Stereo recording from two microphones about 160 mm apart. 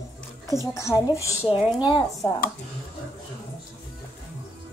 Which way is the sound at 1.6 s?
5° right (ahead or behind).